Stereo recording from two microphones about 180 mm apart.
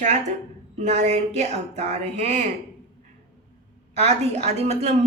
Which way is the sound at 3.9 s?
40° right (ahead or behind).